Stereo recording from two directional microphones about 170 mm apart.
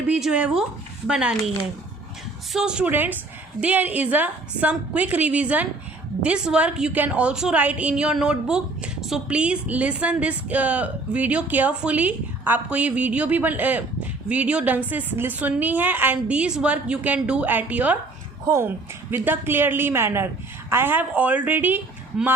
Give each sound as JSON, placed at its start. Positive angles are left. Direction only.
{"t": 0.1, "sound": "speech", "side_deg": -5}
{"t": 2.5, "sound": "a woman's voice", "side_deg": -5}